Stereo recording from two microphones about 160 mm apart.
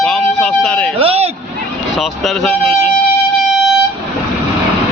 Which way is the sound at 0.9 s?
40° right (ahead or behind).